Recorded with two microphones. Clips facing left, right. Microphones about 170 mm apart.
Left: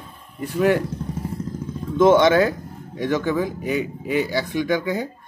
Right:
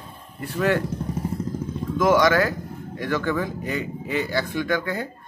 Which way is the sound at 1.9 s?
25° left (ahead or behind).